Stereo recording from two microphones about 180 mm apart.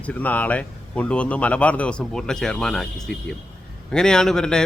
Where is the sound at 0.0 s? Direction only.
10° left (ahead or behind).